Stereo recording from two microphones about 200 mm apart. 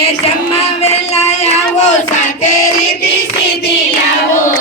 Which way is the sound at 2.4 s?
90° left.